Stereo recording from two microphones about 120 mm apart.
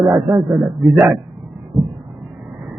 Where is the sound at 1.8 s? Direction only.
Centre (ahead or behind).